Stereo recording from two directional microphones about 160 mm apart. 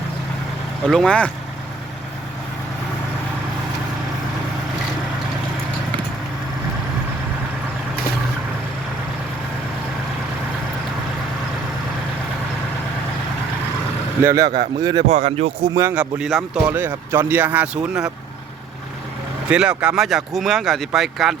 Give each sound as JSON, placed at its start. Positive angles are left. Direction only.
{"t": 0.9, "sound": "speech", "side_deg": 5}
{"t": 14.3, "sound": "speech", "side_deg": -20}
{"t": 15.0, "sound": "speech", "side_deg": -45}
{"t": 15.8, "sound": "speech", "side_deg": -10}
{"t": 19.5, "sound": "speech", "side_deg": -5}